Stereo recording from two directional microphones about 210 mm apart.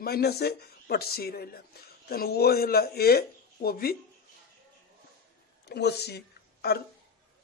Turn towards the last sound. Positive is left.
turn(degrees=50)  # may be behind; listen again after turning